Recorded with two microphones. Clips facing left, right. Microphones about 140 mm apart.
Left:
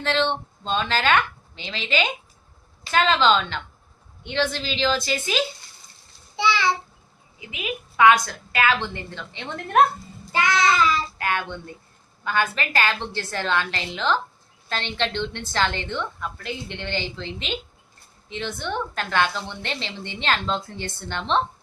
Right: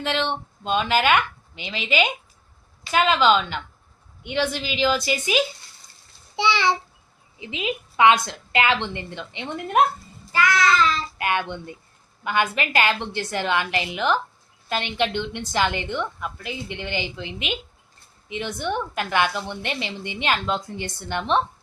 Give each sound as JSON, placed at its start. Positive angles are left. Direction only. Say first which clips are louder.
{"t": 0.0, "sound": "a woman's voice", "louder": "left 2 dB", "side_deg": -10}
{"t": 10.3, "sound": "child singing", "louder": "right 1 dB", "side_deg": 25}
{"t": 11.2, "sound": "a woman's voice", "louder": "right 2 dB", "side_deg": -20}